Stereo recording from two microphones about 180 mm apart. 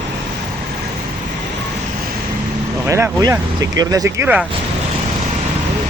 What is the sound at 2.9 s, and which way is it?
Vehicle, 15° right (ahead or behind).